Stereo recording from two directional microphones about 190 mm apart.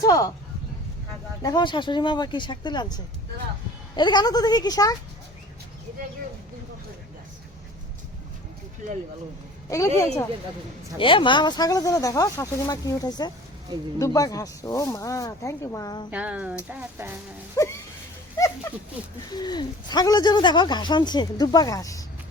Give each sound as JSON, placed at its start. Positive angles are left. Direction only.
{"t": 0.0, "sound": "speech", "side_deg": 20}
{"t": 1.4, "sound": "speech", "side_deg": 20}
{"t": 9.6, "sound": "speech", "side_deg": 15}
{"t": 16.0, "sound": "speech", "side_deg": -5}
{"t": 17.6, "sound": "speech", "side_deg": 20}
{"t": 19.3, "sound": "speech", "side_deg": 20}